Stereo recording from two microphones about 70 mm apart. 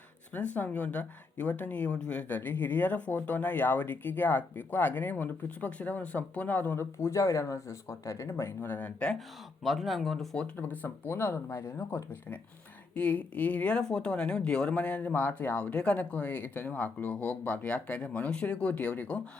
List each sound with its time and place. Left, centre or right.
0.3 s speech: left
6.7 s speech: left
9.6 s speech: centre
10.8 s speech: left
12.9 s speech: left